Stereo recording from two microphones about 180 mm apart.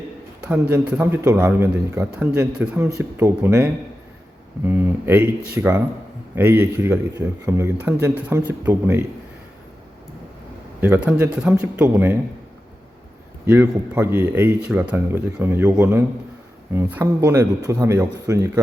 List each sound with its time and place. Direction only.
0.4 s a man's voice: 5° right (ahead or behind)
10.8 s a man's voice: 10° right (ahead or behind)
13.4 s a man's voice: 10° right (ahead or behind)